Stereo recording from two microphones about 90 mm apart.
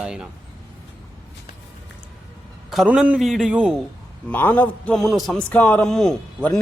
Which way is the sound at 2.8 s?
15° right (ahead or behind).